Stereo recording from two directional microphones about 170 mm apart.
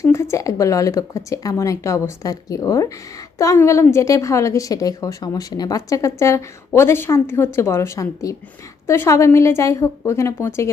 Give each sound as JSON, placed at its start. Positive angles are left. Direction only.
{"t": 0.0, "sound": "a woman's voice", "side_deg": 15}